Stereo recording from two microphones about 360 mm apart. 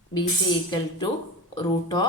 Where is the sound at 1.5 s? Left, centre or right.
Centre.